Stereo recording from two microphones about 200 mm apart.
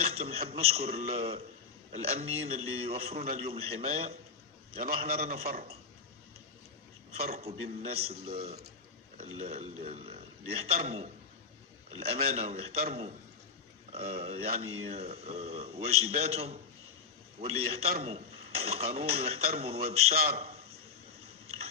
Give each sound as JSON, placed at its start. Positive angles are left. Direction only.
{"t": 0.0, "sound": "a man's voice", "side_deg": -30}
{"t": 7.1, "sound": "a man's voice", "side_deg": -30}
{"t": 12.3, "sound": "a man's voice", "side_deg": -35}
{"t": 13.9, "sound": "a man's voice", "side_deg": -30}
{"t": 20.3, "sound": "a sound", "side_deg": -30}